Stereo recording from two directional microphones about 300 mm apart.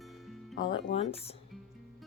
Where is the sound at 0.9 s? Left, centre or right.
Centre.